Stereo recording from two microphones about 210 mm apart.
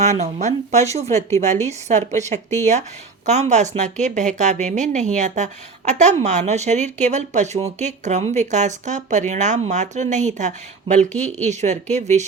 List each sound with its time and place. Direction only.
0.0 s a woman's voice: 35° right (ahead or behind)